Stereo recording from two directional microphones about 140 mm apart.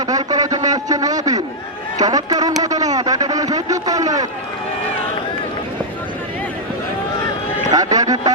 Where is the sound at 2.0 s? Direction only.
25° right (ahead or behind).